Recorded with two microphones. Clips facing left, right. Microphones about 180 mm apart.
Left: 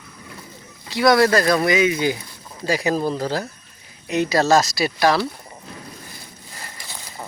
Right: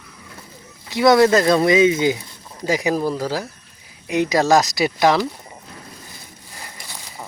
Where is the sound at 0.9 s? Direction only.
20° right (ahead or behind).